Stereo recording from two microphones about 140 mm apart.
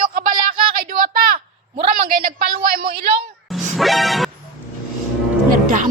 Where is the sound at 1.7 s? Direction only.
40° right (ahead or behind).